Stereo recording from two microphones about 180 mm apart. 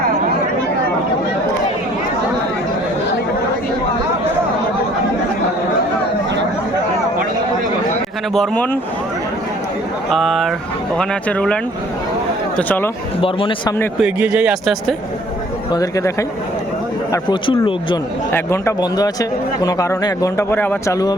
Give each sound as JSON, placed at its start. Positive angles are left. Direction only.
{"t": 8.3, "sound": "speech", "side_deg": 5}
{"t": 10.1, "sound": "speech", "side_deg": 0}
{"t": 13.2, "sound": "a man's voice", "side_deg": 30}
{"t": 14.0, "sound": "speech", "side_deg": -5}
{"t": 15.7, "sound": "a man's voice", "side_deg": 20}
{"t": 18.3, "sound": "speech", "side_deg": 15}